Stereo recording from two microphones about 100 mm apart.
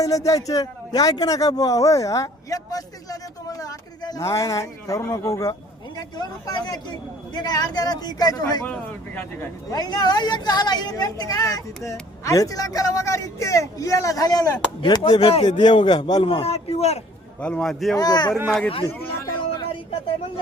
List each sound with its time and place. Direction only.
0.0 s a man's voice: 35° left (ahead or behind)
8.6 s speech: 20° left (ahead or behind)
9.6 s a man's voice: 40° left (ahead or behind)
14.8 s speech: 50° left (ahead or behind)
15.2 s speech: 75° left (ahead or behind)
15.4 s speech: 50° left (ahead or behind)
16.2 s a man's voice: 75° left (ahead or behind)
17.4 s a man's voice: 10° left (ahead or behind)
17.9 s a man's voice: 40° left (ahead or behind)